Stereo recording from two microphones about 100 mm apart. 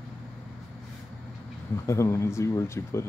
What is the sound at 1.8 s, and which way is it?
Speech, 30° left (ahead or behind).